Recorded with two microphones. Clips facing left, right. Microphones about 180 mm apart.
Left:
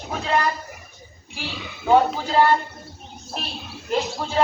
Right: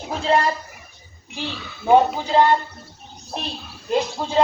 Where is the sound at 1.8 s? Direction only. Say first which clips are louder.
Right 2 dB; 20° right (ahead or behind).